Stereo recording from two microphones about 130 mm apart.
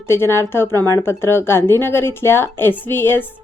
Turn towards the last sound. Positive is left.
turn(degrees=15)  # may be behind; listen again after turning